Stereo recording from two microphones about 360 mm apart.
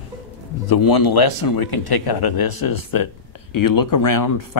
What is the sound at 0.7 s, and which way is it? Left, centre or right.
Speech, left.